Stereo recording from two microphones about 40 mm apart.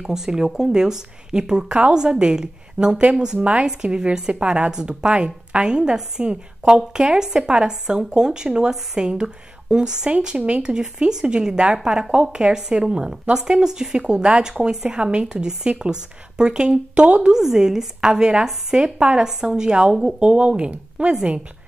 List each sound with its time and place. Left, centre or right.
0.0 s a woman's voice: centre; by 3.6 s right
3.6 s a woman's voice: centre
4.3 s a woman's voice: right
17.3 s a woman's voice: centre